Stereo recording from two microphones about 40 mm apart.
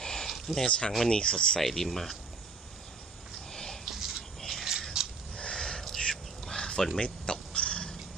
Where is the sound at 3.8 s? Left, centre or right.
Centre.